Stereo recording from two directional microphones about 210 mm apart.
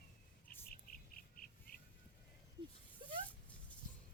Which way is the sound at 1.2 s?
45° left (ahead or behind).